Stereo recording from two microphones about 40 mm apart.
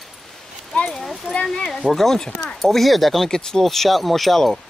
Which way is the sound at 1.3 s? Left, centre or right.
Right.